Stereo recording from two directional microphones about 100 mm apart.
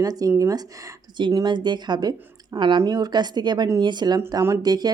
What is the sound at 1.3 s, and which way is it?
Speech, 45° right (ahead or behind).